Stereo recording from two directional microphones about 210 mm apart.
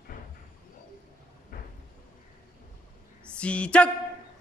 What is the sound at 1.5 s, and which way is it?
Cupboard open or close, 45° left (ahead or behind).